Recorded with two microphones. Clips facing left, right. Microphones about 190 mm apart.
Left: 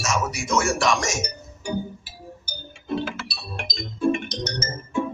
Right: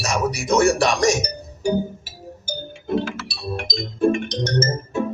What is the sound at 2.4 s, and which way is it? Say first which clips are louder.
Music: right 10 dB; 45° right (ahead or behind).